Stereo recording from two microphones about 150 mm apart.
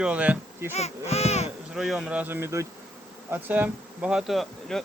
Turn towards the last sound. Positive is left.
turn(degrees=0)  # may be behind; listen again after turning